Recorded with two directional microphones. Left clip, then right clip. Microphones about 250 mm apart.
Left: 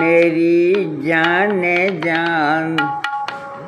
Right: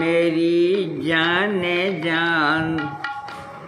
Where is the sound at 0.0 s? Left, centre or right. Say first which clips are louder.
Left 5 dB; centre.